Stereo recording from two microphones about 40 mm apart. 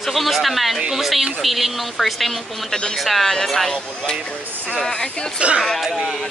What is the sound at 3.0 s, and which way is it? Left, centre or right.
Speech, centre.